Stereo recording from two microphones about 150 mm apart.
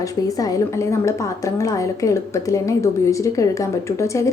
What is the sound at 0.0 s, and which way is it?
A woman's voice, 25° left (ahead or behind).